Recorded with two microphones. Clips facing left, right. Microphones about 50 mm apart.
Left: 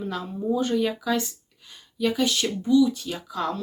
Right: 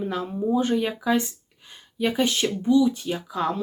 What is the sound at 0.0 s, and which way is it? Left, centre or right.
Speech, centre.